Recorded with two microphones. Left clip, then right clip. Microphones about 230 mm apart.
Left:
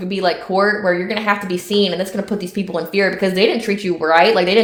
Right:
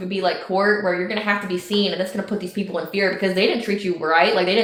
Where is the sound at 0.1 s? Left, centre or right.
Left.